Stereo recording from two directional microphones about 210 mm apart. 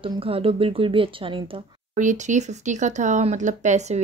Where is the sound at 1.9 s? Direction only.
35° right (ahead or behind).